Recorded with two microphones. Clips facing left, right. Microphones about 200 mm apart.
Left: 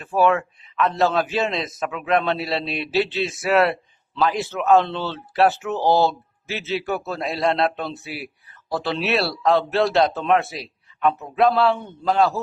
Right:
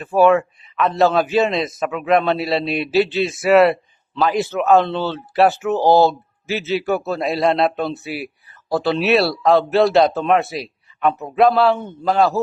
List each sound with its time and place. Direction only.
0.2 s a man's voice: 5° right (ahead or behind)
5.8 s speech: 40° right (ahead or behind)
6.1 s a man's voice: 5° right (ahead or behind)